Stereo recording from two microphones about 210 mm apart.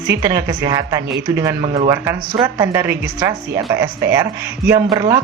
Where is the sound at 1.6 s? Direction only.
30° right (ahead or behind).